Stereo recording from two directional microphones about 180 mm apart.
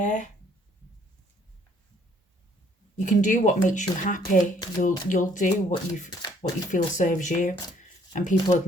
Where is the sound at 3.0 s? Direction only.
45° left (ahead or behind).